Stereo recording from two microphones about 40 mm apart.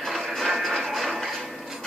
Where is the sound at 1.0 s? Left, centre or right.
Centre.